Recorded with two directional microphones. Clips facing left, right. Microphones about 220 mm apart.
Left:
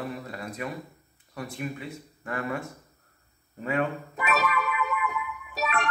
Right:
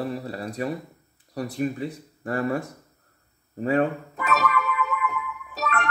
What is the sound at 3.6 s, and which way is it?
Speech, 35° right (ahead or behind).